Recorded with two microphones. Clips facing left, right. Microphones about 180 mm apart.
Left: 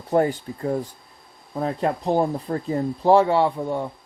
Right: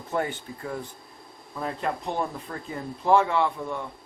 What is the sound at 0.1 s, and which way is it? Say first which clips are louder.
Speech: left 9 dB; 40° left (ahead or behind).